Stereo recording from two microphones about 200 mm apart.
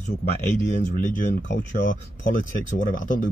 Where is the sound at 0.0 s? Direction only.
35° left (ahead or behind).